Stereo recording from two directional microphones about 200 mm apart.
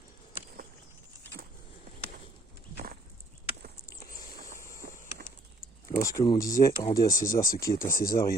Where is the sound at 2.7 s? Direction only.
45° right (ahead or behind).